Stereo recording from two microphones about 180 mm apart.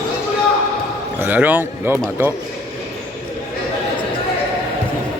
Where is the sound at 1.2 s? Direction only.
10° right (ahead or behind).